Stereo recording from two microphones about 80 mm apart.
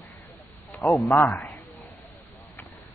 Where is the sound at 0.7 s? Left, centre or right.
Centre.